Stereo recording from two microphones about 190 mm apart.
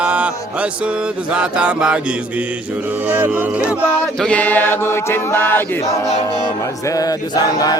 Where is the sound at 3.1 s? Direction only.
10° right (ahead or behind).